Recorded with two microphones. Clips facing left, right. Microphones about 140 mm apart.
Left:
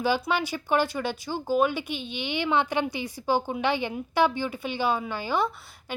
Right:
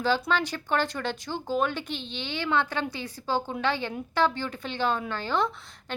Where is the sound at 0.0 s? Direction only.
10° left (ahead or behind).